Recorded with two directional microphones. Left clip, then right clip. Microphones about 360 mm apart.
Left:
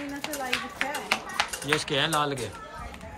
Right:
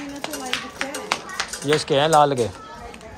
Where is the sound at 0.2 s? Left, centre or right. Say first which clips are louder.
Right 3 dB; centre.